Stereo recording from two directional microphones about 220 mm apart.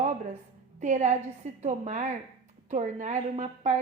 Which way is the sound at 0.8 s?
35° right (ahead or behind).